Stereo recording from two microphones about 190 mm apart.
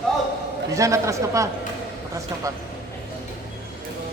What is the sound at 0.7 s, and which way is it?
Speech, 15° right (ahead or behind).